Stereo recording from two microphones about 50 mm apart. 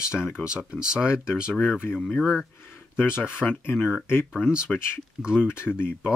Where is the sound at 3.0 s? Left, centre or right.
Left.